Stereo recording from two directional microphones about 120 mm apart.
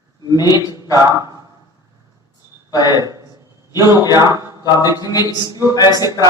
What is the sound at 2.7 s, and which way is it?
Speech, 35° left (ahead or behind).